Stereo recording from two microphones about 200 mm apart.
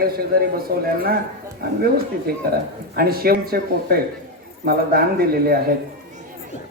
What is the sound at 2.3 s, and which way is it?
Speech, 50° right (ahead or behind).